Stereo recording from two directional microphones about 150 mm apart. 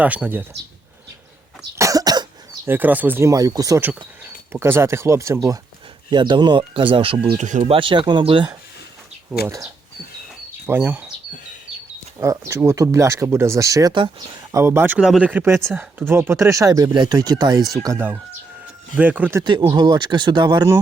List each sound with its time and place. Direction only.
0.0 s speech: 10° right (ahead or behind)
1.8 s cough: 25° right (ahead or behind)
2.6 s speech: 10° right (ahead or behind); by 7.3 s 35° right (ahead or behind)
7.3 s speech: 55° right (ahead or behind)
7.7 s speech: 35° right (ahead or behind)
10.7 s speech: 15° right (ahead or behind)
12.2 s speech: 20° right (ahead or behind)
13.9 s speech: 35° right (ahead or behind)
14.5 s speech: 15° right (ahead or behind)
18.9 s speech: 10° right (ahead or behind)
19.4 s speech: 30° right (ahead or behind)